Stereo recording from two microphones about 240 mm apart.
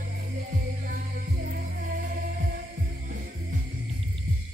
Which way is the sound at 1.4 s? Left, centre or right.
Right.